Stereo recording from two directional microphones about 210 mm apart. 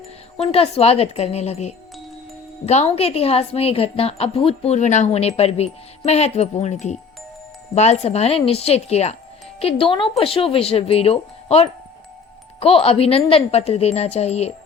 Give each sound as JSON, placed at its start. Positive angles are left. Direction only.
{"t": 0.3, "sound": "a woman's voice", "side_deg": 25}